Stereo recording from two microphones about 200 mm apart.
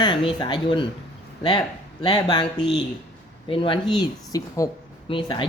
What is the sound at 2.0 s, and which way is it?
Speech, 25° left (ahead or behind).